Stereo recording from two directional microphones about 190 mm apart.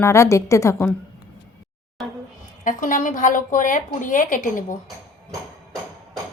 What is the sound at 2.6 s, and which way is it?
A woman's voice, 45° left (ahead or behind).